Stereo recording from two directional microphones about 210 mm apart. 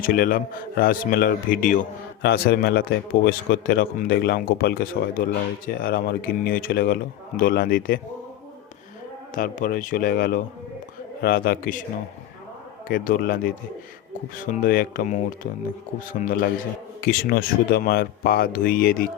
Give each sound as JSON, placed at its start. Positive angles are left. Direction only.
{"t": 0.0, "sound": "a man's voice", "side_deg": 45}
{"t": 9.3, "sound": "a man's voice", "side_deg": 40}
{"t": 12.9, "sound": "a man's voice", "side_deg": 45}
{"t": 16.2, "sound": "a man's voice", "side_deg": 40}